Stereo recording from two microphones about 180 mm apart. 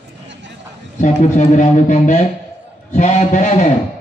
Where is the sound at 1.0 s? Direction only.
40° left (ahead or behind).